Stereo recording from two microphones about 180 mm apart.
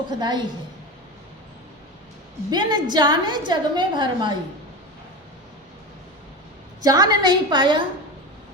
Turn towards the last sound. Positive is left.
turn(degrees=-25)  # may be behind; listen again after turning